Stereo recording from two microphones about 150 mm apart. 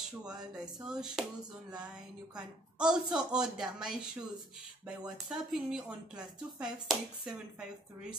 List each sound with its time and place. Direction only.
0.8 s speech: 5° right (ahead or behind)
2.8 s speech: 5° right (ahead or behind)